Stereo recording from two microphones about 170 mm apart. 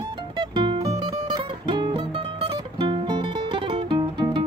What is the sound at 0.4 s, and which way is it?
Music, 30° right (ahead or behind).